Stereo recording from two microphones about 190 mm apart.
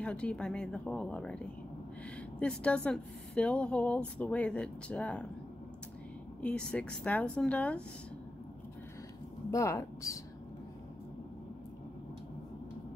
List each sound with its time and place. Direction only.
0.0 s speech: 5° left (ahead or behind)
2.4 s speech: 5° left (ahead or behind)
6.4 s speech: 5° left (ahead or behind)
9.5 s speech: 15° left (ahead or behind)